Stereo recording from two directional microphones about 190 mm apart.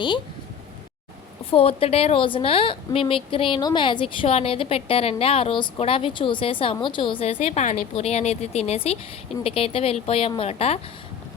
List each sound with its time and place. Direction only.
1.5 s a woman's voice: 30° left (ahead or behind)